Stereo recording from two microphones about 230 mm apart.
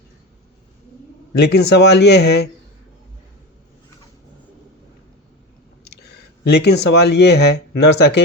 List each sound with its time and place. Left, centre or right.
1.4 s speech: left
5.8 s speech: left